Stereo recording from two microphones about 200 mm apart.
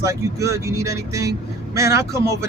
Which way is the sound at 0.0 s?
15° right (ahead or behind).